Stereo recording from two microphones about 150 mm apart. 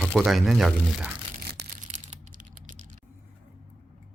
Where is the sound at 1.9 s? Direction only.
60° right (ahead or behind).